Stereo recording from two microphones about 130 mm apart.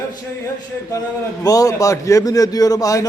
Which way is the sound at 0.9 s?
25° left (ahead or behind).